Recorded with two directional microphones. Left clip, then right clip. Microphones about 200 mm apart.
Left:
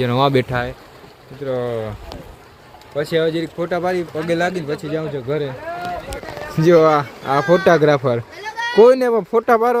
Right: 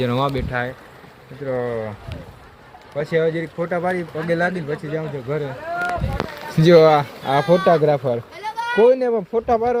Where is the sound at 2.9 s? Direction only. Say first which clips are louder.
Left 2 dB; 25° left (ahead or behind).